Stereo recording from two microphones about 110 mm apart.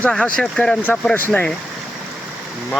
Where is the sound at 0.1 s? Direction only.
5° left (ahead or behind).